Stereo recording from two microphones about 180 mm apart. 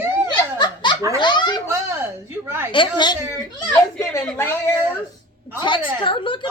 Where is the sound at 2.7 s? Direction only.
25° left (ahead or behind); by 4.7 s 10° left (ahead or behind).